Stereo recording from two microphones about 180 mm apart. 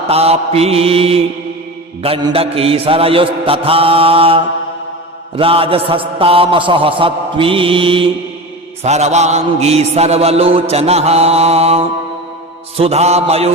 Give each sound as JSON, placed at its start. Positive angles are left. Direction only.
{"t": 0.1, "sound": "a man's voice", "side_deg": -35}